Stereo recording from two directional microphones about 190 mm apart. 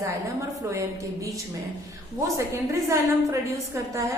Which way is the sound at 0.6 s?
15° right (ahead or behind).